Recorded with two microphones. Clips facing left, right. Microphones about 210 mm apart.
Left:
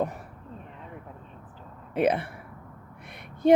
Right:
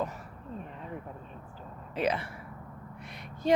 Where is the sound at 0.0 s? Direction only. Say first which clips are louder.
Left 5 dB; 55° left (ahead or behind).